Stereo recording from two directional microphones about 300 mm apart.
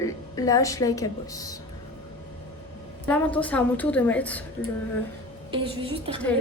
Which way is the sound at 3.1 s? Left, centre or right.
Centre.